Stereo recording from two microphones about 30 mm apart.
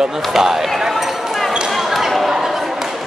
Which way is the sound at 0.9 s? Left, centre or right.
Centre.